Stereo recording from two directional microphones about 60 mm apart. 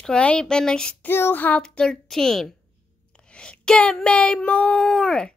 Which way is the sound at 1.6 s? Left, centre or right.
Centre.